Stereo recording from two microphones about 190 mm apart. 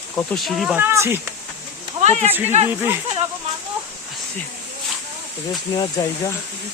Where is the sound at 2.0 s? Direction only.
35° right (ahead or behind).